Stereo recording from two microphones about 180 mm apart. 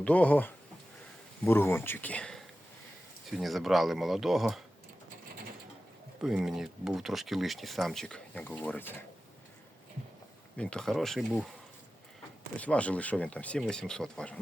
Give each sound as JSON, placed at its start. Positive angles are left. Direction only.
{"t": 0.0, "sound": "speech", "side_deg": 5}
{"t": 6.2, "sound": "speech", "side_deg": -5}
{"t": 10.6, "sound": "speech", "side_deg": 5}
{"t": 12.5, "sound": "speech", "side_deg": 5}